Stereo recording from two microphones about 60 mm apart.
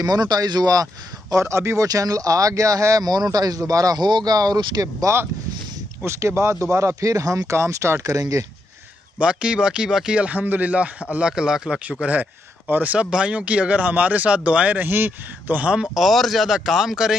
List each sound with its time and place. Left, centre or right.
0.0 s speech: right
1.3 s speech: right
1.8 s speech: right
6.0 s speech: right
7.5 s speech: right
9.2 s speech: centre
12.0 s speech: right
13.0 s speech: centre
14.8 s a man's voice: right
15.7 s speech: centre